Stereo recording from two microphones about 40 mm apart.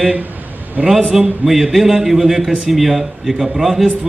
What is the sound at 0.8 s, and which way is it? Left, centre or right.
Speech, right.